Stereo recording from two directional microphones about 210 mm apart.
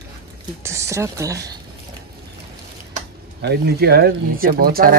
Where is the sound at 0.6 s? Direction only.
15° right (ahead or behind).